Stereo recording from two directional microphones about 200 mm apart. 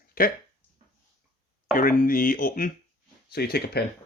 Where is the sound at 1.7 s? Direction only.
45° left (ahead or behind).